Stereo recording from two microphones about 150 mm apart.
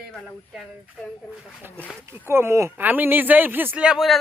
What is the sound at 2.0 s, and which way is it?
Speech, 15° right (ahead or behind).